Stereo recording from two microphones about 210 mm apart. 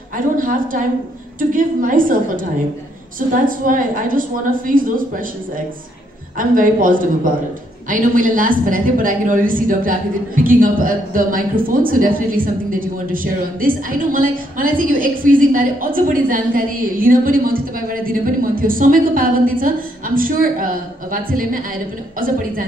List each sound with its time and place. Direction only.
0.4 s a woman's voice: 40° right (ahead or behind)
6.3 s a woman's voice: 40° right (ahead or behind)